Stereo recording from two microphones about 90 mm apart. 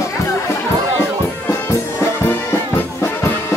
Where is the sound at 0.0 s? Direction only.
35° left (ahead or behind).